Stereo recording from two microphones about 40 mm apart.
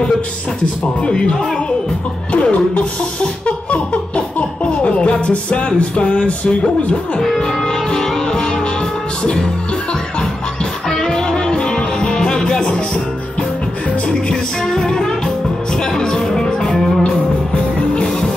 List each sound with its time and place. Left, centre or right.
1.0 s speech: centre
2.3 s music: left
7.2 s music: centre
10.6 s music: centre
14.0 s music: centre
16.7 s music: centre
17.0 s music: left
18.0 s music: centre